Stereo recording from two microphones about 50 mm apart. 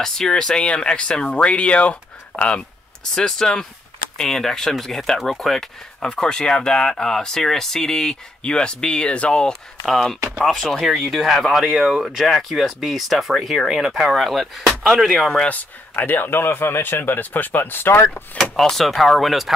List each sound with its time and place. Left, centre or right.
0.0 s speech: centre; by 2.6 s left
3.2 s speech: centre
9.8 s speech: centre
10.9 s speech: centre
15.4 s a man's voice: left
18.4 s speech: centre